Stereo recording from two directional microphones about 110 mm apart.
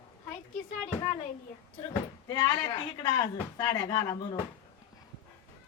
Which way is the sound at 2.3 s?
35° left (ahead or behind).